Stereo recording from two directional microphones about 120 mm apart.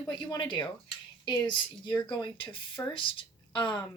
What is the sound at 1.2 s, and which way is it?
A woman's voice, 40° left (ahead or behind).